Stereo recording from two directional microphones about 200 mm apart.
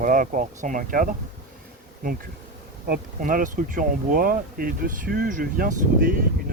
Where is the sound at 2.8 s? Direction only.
45° right (ahead or behind).